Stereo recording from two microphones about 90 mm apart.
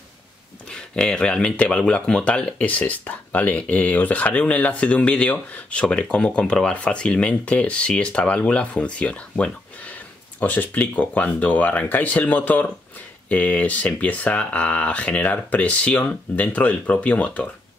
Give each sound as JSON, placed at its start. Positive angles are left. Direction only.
{"t": 0.7, "sound": "speech", "side_deg": 10}